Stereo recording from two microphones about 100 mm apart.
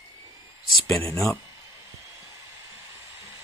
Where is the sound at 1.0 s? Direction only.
30° left (ahead or behind).